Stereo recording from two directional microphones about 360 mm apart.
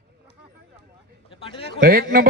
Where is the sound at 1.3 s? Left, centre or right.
Centre.